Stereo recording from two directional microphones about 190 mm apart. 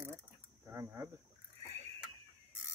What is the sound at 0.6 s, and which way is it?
Ratchet, 10° right (ahead or behind).